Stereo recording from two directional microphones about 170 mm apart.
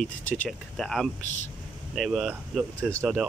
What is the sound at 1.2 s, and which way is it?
Speech, 45° left (ahead or behind).